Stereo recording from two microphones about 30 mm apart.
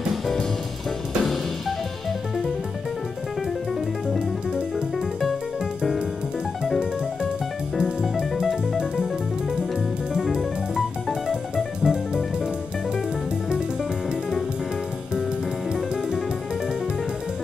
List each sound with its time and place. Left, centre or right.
4.6 s music: right
8.7 s music: centre
11.5 s music: right